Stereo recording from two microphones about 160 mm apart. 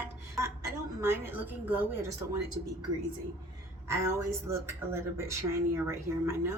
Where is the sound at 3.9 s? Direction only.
15° right (ahead or behind).